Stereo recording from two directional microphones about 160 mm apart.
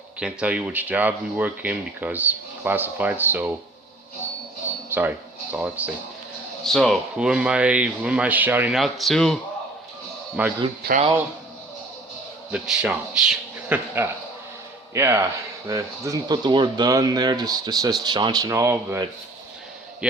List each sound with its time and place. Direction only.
0.2 s speech: 5° right (ahead or behind)
4.9 s speech: 10° right (ahead or behind)
6.7 s speech: centre (ahead or behind)
10.4 s speech: 10° right (ahead or behind)
12.5 s speech: 5° right (ahead or behind)